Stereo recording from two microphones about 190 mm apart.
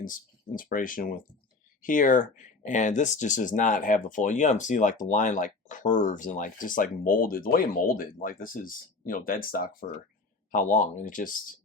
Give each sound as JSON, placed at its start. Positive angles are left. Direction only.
{"t": 0.0, "sound": "speech", "side_deg": 45}